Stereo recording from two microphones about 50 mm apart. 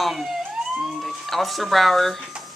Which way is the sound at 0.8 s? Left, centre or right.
Centre.